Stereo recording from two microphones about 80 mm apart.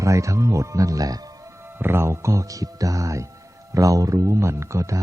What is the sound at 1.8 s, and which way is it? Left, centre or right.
Speech, right.